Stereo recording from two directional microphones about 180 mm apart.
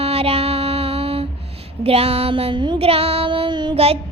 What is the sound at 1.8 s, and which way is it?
Child singing, 35° right (ahead or behind).